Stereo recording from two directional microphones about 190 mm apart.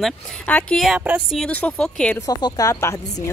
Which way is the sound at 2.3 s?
20° left (ahead or behind).